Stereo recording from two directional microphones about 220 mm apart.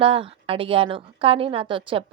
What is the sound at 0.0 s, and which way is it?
A woman's voice, 25° right (ahead or behind).